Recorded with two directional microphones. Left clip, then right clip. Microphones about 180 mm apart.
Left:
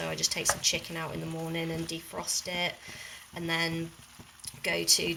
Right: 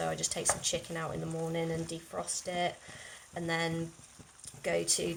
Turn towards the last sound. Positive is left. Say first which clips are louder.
# left 4 dB
turn(degrees=-20)  # may be behind; listen again after turning